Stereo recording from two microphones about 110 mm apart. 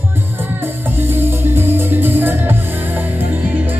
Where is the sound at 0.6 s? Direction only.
20° right (ahead or behind).